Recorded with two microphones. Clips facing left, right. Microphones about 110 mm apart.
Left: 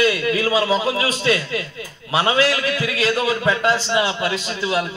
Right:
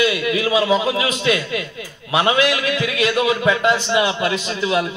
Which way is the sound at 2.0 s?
30° left (ahead or behind).